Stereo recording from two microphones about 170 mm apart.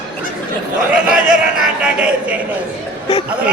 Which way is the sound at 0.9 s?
5° right (ahead or behind).